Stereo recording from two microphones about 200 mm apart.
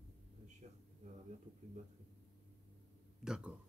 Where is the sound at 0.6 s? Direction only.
35° right (ahead or behind).